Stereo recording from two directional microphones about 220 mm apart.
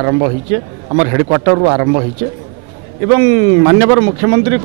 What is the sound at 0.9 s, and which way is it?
A man's voice, 25° right (ahead or behind).